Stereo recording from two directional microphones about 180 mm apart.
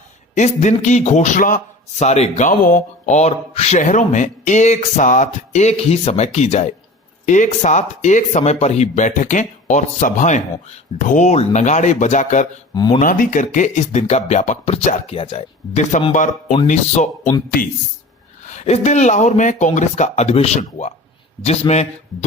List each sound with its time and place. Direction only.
0.3 s a man's voice: 40° left (ahead or behind)
12.7 s speech: 20° left (ahead or behind)
13.0 s a man's voice: 50° left (ahead or behind)
18.5 s a man's voice: 40° left (ahead or behind)